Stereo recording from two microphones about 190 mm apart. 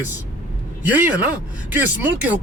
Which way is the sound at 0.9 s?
10° right (ahead or behind).